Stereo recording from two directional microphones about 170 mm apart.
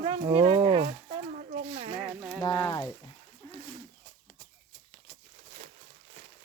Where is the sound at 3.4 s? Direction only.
25° left (ahead or behind).